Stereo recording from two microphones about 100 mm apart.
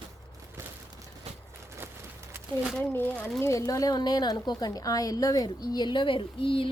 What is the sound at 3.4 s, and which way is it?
A woman's voice, 35° left (ahead or behind).